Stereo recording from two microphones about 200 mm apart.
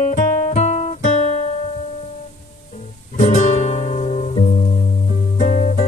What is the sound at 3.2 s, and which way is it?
Music, 35° left (ahead or behind).